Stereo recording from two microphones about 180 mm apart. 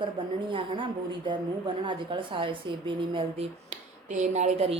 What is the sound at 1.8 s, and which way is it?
Speech, 25° right (ahead or behind).